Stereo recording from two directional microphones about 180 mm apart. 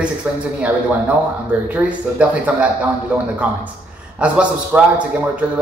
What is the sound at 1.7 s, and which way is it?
Speech, 10° right (ahead or behind).